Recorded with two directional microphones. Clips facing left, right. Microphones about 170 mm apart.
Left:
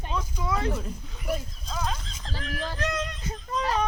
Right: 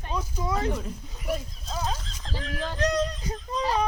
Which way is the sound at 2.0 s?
Centre (ahead or behind).